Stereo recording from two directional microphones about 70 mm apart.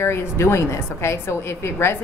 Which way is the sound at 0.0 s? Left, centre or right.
Left.